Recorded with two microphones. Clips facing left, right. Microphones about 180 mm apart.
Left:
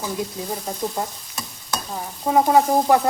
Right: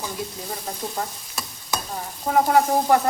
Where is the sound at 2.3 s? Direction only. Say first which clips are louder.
Left 2 dB; 20° left (ahead or behind).